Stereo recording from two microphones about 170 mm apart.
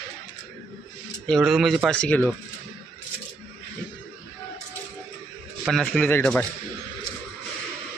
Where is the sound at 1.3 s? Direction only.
Centre (ahead or behind).